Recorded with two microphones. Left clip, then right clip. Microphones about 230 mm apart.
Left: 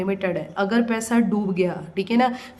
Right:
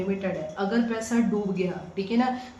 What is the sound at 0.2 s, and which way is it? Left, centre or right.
A woman's voice, left.